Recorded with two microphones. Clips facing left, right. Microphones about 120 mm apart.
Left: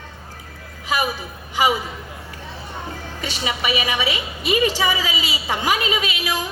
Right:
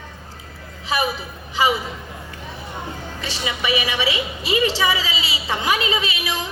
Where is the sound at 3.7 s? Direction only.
25° right (ahead or behind).